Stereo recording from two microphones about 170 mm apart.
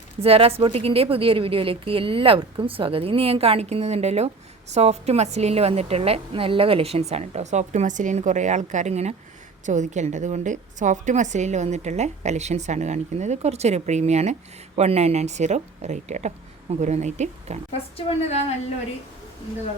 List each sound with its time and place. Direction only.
0.2 s a woman's voice: 35° right (ahead or behind)
17.9 s a woman's voice: 35° left (ahead or behind)